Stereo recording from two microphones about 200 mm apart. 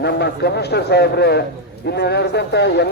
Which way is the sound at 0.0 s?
55° left (ahead or behind).